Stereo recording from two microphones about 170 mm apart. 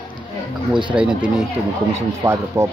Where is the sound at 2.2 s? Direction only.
20° right (ahead or behind).